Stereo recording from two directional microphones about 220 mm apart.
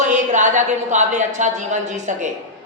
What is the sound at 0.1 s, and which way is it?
A woman's voice, 35° right (ahead or behind).